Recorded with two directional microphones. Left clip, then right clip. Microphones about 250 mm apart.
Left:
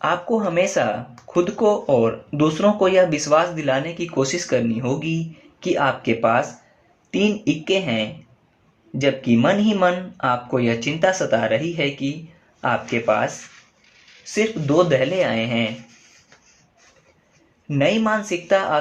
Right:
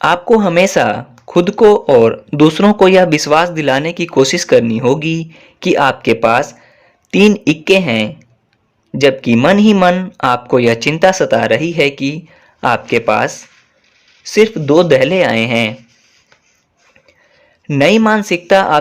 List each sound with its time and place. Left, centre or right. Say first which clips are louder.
0.0 s speech: right 10 dB; right
14.3 s speech: right 9 dB; right
17.7 s speech: right 9 dB; right